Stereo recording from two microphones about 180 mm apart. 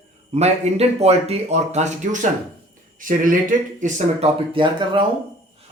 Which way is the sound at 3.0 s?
50° right (ahead or behind).